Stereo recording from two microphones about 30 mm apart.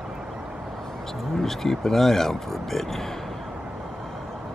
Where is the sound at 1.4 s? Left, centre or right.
Centre.